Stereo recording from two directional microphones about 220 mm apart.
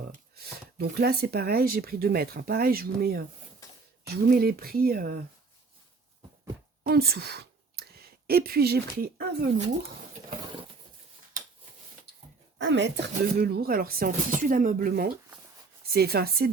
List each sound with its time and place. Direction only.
0.1 s speech: 45° right (ahead or behind)
3.6 s a sound: 15° left (ahead or behind)
4.0 s speech: 45° right (ahead or behind)
6.8 s speech: 45° right (ahead or behind)
12.5 s speech: 55° right (ahead or behind)